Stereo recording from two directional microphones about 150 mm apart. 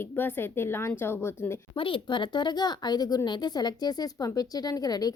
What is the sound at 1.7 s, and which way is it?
A woman's voice, 35° left (ahead or behind).